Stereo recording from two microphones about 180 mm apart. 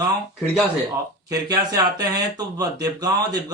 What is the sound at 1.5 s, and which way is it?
Speech, 20° right (ahead or behind).